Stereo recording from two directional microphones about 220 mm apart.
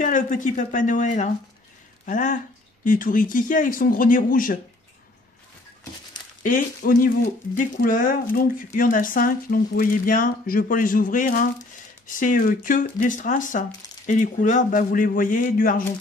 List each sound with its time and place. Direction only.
0.0 s speech: 35° left (ahead or behind)
6.4 s speech: 35° left (ahead or behind)